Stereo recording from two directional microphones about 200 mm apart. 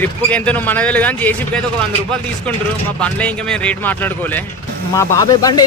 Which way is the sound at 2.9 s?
5° left (ahead or behind).